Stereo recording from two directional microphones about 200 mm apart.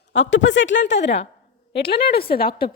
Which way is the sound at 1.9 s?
50° left (ahead or behind).